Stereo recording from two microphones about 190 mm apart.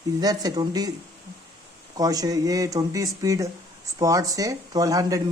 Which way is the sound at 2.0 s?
20° right (ahead or behind).